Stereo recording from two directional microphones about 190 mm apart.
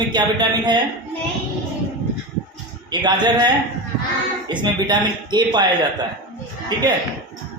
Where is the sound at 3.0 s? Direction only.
20° right (ahead or behind).